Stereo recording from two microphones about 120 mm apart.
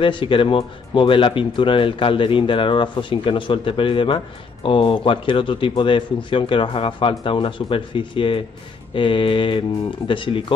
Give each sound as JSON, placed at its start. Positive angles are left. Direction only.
{"t": 0.0, "sound": "speech", "side_deg": 45}